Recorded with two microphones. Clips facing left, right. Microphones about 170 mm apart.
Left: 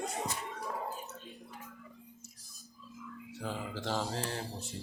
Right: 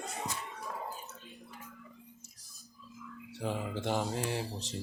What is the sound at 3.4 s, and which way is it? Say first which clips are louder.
Speech: right 4 dB; 20° right (ahead or behind).